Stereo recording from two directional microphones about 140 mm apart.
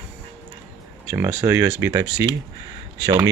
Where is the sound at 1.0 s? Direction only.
15° right (ahead or behind).